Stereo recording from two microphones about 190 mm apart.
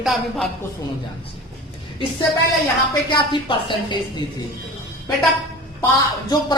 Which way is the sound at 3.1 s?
25° left (ahead or behind).